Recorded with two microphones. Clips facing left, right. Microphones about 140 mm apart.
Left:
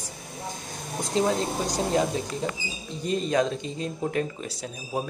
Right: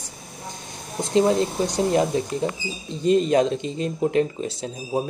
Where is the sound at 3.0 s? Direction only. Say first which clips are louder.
Right 6 dB; 30° right (ahead or behind).